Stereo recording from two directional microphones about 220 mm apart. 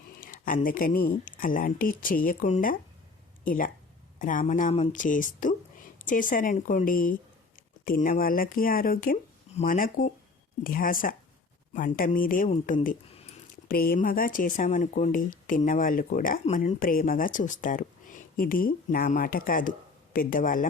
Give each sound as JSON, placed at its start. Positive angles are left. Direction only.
{"t": 0.2, "sound": "speech", "side_deg": 40}